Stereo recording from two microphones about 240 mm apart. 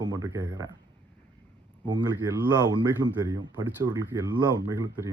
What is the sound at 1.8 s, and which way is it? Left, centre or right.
Speech, centre.